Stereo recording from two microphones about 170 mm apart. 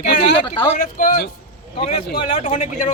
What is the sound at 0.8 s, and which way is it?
Speech, 55° left (ahead or behind).